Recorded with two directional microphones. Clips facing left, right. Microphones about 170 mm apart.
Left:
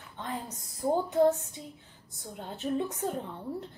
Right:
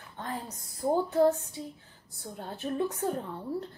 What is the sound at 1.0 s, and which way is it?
A woman's voice, 20° left (ahead or behind).